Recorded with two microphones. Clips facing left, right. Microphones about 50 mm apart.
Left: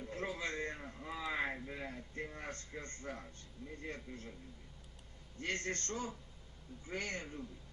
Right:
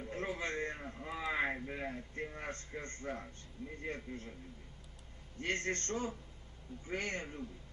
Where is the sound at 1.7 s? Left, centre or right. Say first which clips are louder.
Right 3 dB; right.